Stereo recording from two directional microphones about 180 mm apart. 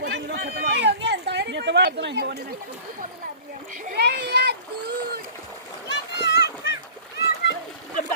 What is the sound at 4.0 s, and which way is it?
A child's voice, 65° right (ahead or behind).